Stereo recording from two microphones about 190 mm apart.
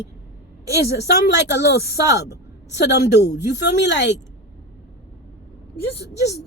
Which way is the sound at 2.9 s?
60° left (ahead or behind).